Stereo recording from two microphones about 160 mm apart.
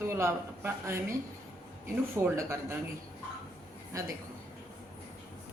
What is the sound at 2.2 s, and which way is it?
Speech, 15° right (ahead or behind).